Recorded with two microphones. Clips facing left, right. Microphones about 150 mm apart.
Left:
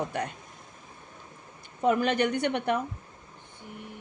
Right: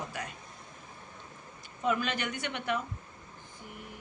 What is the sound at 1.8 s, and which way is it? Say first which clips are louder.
Speech: left 7 dB; 55° left (ahead or behind).